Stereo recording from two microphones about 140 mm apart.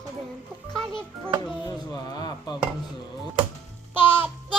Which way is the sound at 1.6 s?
30° left (ahead or behind).